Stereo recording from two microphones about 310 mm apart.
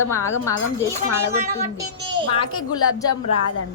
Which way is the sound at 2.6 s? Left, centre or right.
Left.